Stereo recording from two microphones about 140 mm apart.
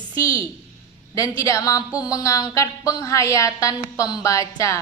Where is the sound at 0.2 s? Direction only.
25° left (ahead or behind).